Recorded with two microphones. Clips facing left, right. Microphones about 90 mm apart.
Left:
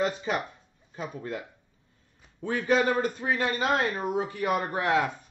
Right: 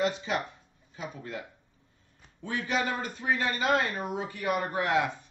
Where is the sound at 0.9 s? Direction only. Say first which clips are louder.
Left 4 dB; 40° left (ahead or behind).